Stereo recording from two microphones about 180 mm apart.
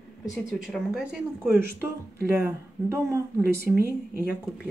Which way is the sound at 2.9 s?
15° right (ahead or behind).